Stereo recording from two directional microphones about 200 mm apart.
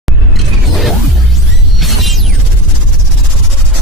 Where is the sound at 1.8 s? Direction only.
Centre (ahead or behind).